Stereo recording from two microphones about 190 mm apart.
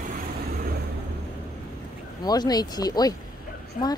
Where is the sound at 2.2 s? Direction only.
20° left (ahead or behind).